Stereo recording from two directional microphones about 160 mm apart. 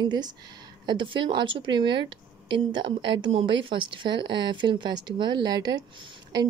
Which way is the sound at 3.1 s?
35° right (ahead or behind).